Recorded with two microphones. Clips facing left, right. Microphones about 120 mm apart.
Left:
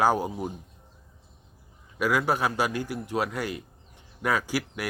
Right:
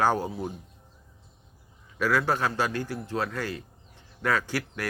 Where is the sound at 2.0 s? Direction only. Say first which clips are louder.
Even; 15° left (ahead or behind).